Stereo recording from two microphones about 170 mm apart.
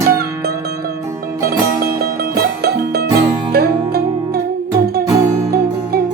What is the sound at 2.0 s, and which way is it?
Music, 70° right (ahead or behind).